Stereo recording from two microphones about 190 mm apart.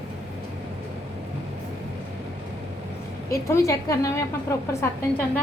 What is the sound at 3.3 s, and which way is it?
Speech, 15° left (ahead or behind).